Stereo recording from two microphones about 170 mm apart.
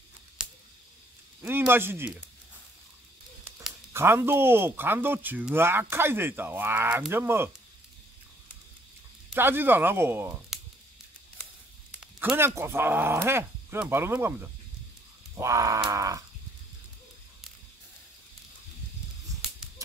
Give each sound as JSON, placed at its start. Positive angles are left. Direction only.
{"t": 1.7, "sound": "speech", "side_deg": -15}
{"t": 3.9, "sound": "speech", "side_deg": -15}
{"t": 9.3, "sound": "speech", "side_deg": -10}
{"t": 10.5, "sound": "a sound", "side_deg": 0}
{"t": 12.0, "sound": "a sound", "side_deg": -5}
{"t": 12.4, "sound": "speech", "side_deg": -15}
{"t": 15.3, "sound": "groan", "side_deg": -20}